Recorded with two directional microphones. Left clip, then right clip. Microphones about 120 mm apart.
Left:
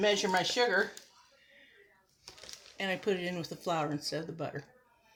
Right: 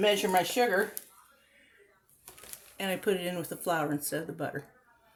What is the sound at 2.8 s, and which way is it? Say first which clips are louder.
A woman's voice: right 2 dB; 25° right (ahead or behind).